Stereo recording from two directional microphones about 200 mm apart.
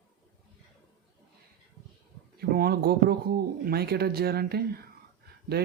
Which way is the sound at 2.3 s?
50° right (ahead or behind).